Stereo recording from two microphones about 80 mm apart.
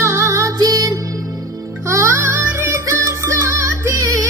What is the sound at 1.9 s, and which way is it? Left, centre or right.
Music, right.